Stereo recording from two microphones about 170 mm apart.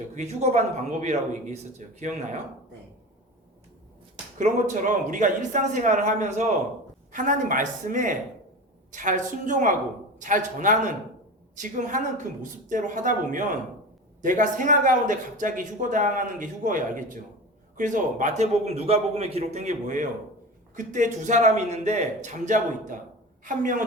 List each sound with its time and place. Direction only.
0.2 s speech: 40° right (ahead or behind)
4.4 s a man's voice: 45° right (ahead or behind)